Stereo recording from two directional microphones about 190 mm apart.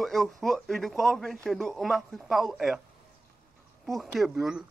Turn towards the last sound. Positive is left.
turn(degrees=0)  # may be behind; listen again after turning